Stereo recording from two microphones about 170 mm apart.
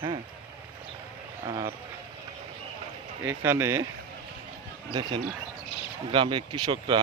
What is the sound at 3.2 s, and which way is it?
Speech, 15° right (ahead or behind).